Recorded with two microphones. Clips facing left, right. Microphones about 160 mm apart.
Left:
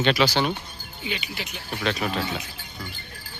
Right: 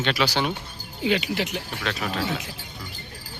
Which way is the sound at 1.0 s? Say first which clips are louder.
Right 9 dB; 85° right.